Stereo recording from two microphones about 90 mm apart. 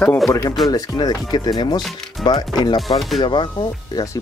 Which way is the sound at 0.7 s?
50° left (ahead or behind).